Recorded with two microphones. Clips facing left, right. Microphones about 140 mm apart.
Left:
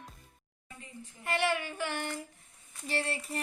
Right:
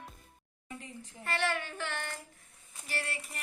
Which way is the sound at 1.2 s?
15° left (ahead or behind).